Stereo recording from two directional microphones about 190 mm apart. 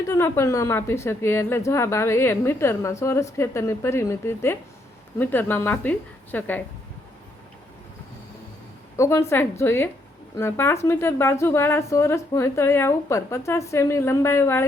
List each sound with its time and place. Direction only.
0.0 s speech: 15° left (ahead or behind)
9.0 s speech: 15° left (ahead or behind)